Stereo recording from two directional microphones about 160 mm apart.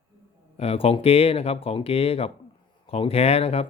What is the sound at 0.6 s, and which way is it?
Speech, 40° left (ahead or behind).